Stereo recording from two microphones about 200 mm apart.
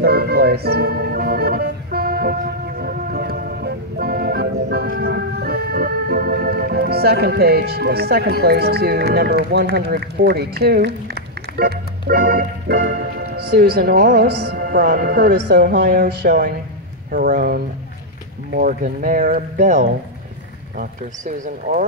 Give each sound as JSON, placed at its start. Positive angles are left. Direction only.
{"t": 0.0, "sound": "music", "side_deg": -50}
{"t": 9.8, "sound": "speech", "side_deg": -55}
{"t": 11.5, "sound": "music", "side_deg": -50}
{"t": 17.1, "sound": "speech", "side_deg": -45}